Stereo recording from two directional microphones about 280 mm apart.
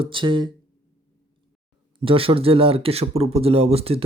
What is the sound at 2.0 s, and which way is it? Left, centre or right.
Speech, centre.